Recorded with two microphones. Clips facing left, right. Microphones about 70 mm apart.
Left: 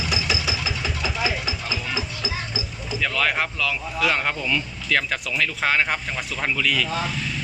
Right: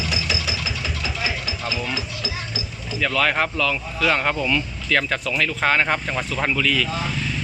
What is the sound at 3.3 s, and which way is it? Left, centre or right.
Speech, centre.